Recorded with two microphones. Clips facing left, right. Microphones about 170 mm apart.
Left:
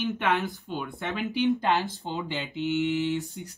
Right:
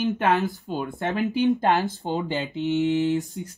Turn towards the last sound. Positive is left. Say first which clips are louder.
# right 4 dB
turn(degrees=-40)  # may be behind; listen again after turning